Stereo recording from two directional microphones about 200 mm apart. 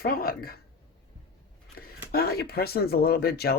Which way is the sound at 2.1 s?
50° left (ahead or behind).